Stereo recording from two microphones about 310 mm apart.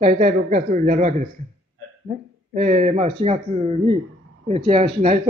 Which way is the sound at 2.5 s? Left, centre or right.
Right.